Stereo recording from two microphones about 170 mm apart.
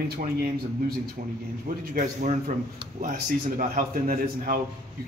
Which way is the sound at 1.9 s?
50° right (ahead or behind).